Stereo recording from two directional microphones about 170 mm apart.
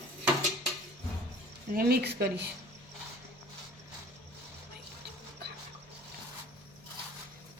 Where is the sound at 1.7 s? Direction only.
65° right (ahead or behind).